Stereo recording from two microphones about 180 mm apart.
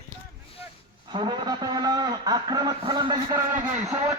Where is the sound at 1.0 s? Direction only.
25° right (ahead or behind).